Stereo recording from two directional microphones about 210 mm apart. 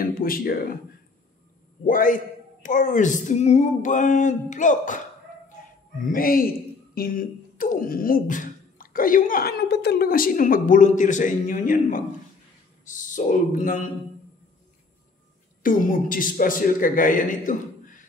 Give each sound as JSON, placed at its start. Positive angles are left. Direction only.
{"t": 0.0, "sound": "speech", "side_deg": 45}
{"t": 1.9, "sound": "speech", "side_deg": 40}
{"t": 6.0, "sound": "speech", "side_deg": 45}
{"t": 15.6, "sound": "speech", "side_deg": 40}